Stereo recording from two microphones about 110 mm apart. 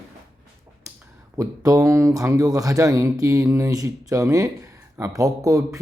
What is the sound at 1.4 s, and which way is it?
Speech, 30° right (ahead or behind).